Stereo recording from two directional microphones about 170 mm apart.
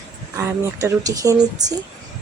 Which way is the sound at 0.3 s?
15° right (ahead or behind).